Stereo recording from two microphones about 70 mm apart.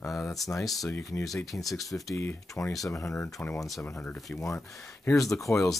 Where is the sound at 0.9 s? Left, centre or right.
Left.